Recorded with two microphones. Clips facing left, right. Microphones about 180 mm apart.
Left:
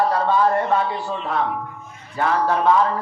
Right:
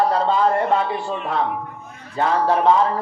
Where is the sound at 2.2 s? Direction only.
25° right (ahead or behind).